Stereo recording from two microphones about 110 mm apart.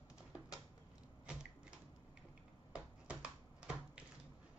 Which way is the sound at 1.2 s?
10° right (ahead or behind).